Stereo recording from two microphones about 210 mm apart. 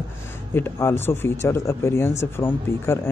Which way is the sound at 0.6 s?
10° left (ahead or behind).